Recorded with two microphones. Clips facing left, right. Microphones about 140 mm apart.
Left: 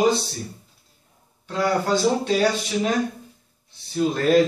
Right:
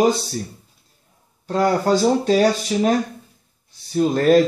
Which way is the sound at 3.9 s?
45° right (ahead or behind).